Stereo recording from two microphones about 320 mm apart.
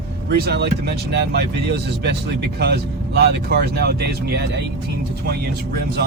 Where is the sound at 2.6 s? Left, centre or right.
Right.